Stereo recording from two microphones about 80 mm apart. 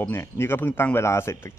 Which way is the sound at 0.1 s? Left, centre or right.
Left.